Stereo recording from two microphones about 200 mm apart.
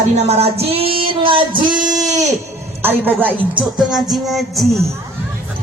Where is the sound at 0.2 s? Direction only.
30° right (ahead or behind).